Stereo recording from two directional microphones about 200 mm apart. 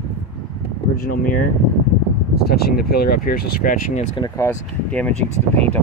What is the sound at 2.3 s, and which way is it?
Speech, 50° left (ahead or behind).